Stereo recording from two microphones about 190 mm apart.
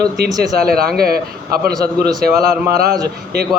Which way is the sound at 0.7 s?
55° right (ahead or behind).